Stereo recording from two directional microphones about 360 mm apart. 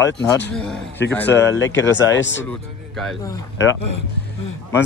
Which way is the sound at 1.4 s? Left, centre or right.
Left.